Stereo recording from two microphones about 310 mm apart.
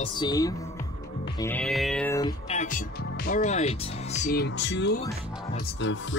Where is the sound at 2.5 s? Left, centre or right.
Left.